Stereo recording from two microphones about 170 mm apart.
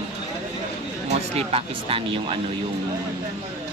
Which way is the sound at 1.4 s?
35° right (ahead or behind).